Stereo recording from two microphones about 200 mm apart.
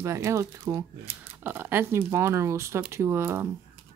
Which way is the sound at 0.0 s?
15° right (ahead or behind).